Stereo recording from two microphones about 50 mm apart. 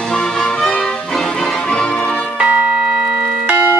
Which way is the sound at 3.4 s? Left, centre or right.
Right.